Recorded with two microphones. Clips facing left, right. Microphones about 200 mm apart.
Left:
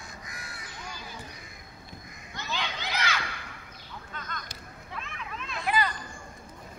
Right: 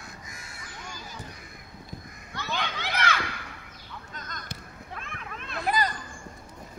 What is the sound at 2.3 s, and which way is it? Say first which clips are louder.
Children playing: right 2 dB; 55° right (ahead or behind).